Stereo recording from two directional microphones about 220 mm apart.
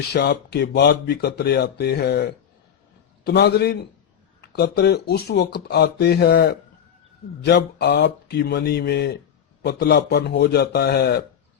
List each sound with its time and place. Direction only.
0.1 s speech: 45° left (ahead or behind)